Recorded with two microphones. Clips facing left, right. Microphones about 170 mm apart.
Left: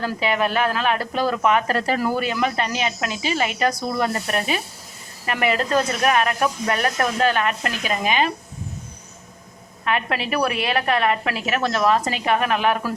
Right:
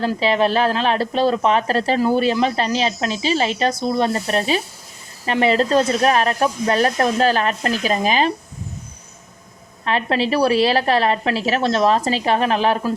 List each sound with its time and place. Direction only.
0.0 s a woman's voice: 30° right (ahead or behind)
9.8 s a woman's voice: 30° right (ahead or behind)